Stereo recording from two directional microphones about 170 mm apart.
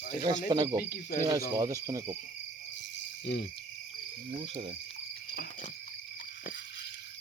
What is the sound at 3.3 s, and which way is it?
Speech, 75° left (ahead or behind).